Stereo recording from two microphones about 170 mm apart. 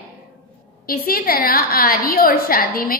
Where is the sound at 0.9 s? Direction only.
60° left (ahead or behind).